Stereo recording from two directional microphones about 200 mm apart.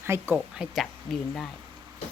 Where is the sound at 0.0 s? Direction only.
10° right (ahead or behind).